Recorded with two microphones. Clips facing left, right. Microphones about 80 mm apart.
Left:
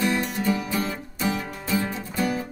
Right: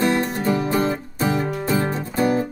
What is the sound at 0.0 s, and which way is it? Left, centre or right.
Music, right.